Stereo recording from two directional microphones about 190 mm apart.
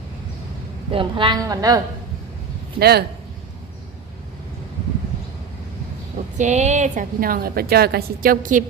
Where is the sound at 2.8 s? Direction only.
55° right (ahead or behind).